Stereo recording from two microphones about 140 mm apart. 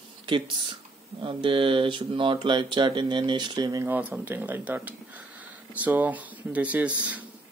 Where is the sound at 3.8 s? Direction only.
10° right (ahead or behind).